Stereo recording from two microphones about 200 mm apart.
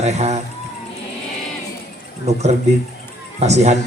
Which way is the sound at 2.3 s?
35° right (ahead or behind).